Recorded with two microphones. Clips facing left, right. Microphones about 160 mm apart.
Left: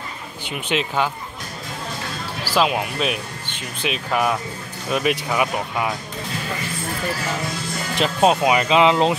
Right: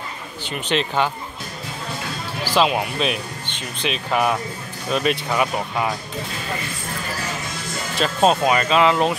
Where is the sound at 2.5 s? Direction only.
Centre (ahead or behind).